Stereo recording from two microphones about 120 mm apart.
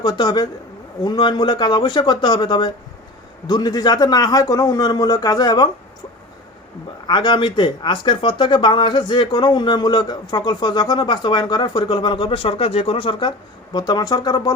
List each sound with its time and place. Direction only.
0.0 s speech: 35° left (ahead or behind)
7.1 s speech: 40° left (ahead or behind)